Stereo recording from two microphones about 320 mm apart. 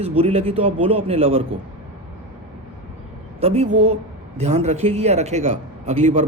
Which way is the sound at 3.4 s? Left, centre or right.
Centre.